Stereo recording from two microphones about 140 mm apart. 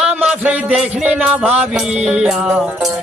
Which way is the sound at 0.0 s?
10° right (ahead or behind).